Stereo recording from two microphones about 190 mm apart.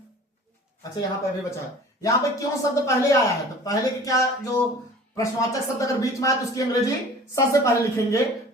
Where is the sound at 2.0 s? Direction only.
15° left (ahead or behind).